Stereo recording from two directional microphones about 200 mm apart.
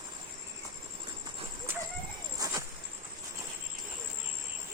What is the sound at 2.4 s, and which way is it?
Insect, 20° right (ahead or behind).